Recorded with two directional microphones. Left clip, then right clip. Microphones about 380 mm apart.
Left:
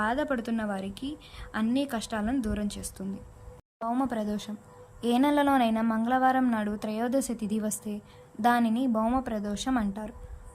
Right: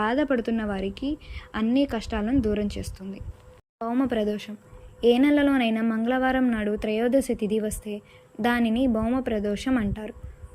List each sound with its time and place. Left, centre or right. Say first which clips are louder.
0.0 s speech: right 4 dB; centre